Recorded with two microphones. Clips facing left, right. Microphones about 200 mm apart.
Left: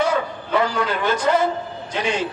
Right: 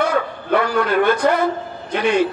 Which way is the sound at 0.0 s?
60° right (ahead or behind).